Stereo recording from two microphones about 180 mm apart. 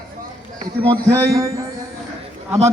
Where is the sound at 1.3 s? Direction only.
20° right (ahead or behind).